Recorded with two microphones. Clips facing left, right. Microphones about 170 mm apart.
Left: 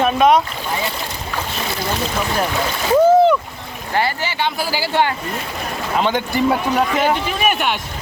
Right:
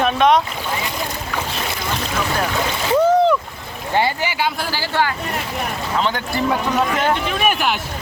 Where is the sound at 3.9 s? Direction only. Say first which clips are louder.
Right 1 dB; 15° right (ahead or behind).